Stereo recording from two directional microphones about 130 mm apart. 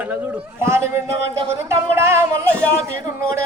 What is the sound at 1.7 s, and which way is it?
Music, 20° right (ahead or behind).